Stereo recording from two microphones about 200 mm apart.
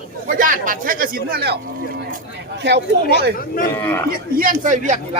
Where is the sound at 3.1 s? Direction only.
55° right (ahead or behind).